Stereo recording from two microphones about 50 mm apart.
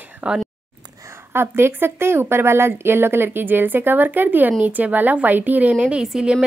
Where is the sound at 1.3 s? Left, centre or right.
Right.